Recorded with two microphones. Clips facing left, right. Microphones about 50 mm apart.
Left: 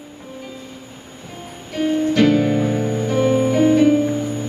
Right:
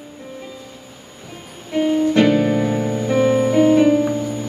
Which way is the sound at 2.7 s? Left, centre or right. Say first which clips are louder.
Even; right.